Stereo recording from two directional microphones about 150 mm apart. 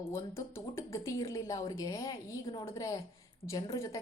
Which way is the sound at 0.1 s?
15° left (ahead or behind).